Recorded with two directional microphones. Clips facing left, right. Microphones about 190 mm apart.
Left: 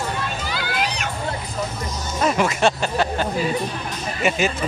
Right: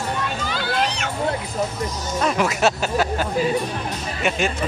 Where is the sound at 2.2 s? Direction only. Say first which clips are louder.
Left 1 dB; centre (ahead or behind).